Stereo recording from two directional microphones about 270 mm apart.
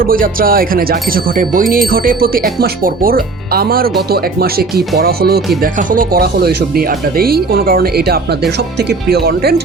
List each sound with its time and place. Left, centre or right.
0.0 s speech: right